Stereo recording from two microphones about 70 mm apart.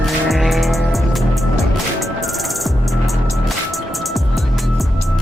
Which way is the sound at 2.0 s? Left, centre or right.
Centre.